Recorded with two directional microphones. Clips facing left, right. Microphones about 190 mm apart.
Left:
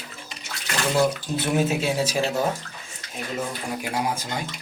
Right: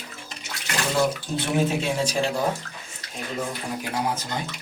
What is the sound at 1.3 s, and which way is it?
Speech, 5° left (ahead or behind).